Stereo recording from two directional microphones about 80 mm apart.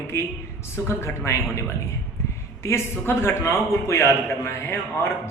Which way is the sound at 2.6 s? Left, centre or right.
Left.